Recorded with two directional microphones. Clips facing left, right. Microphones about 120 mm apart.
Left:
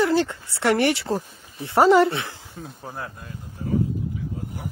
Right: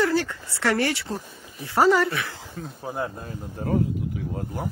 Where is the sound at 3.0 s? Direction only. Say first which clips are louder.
Right 7 dB; 30° right (ahead or behind).